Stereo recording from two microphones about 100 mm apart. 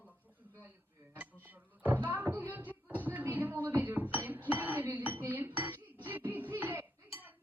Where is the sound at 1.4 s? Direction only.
15° right (ahead or behind).